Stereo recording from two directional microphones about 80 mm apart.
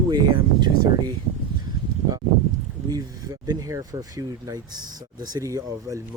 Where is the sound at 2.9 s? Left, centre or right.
Right.